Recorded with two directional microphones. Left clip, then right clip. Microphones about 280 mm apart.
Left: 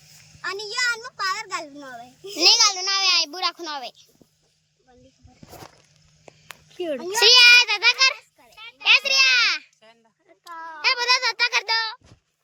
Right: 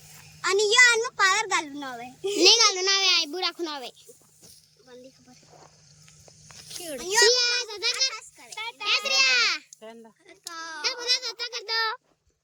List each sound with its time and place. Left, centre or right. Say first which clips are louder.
0.4 s a child's voice: right 7 dB; centre
6.8 s a child's voice: left 1 dB; centre
7.3 s a child's voice: left 11 dB; centre
10.2 s a child's voice: left 1 dB; centre